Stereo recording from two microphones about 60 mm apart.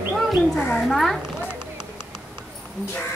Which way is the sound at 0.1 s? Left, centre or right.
Centre.